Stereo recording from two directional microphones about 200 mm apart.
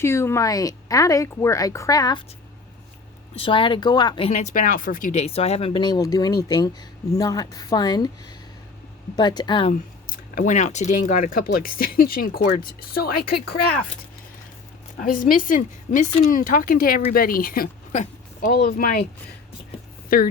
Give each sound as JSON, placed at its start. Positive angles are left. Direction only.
{"t": 0.0, "sound": "speech", "side_deg": 15}
{"t": 3.4, "sound": "speech", "side_deg": 25}
{"t": 4.3, "sound": "speech", "side_deg": 35}
{"t": 5.2, "sound": "speech", "side_deg": 30}
{"t": 10.3, "sound": "speech", "side_deg": 40}
{"t": 14.9, "sound": "speech", "side_deg": 45}
{"t": 18.5, "sound": "speech", "side_deg": 50}
{"t": 20.1, "sound": "speech", "side_deg": 45}